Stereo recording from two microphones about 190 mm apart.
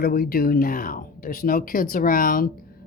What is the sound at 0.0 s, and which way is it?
Speech, 50° left (ahead or behind).